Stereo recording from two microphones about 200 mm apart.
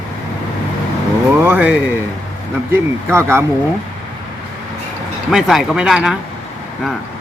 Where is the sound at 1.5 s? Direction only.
5° right (ahead or behind).